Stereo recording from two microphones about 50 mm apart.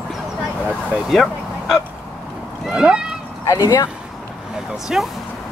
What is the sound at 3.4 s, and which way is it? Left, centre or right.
Speech, left.